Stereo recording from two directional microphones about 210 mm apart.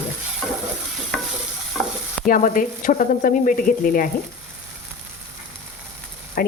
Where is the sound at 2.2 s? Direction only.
40° left (ahead or behind).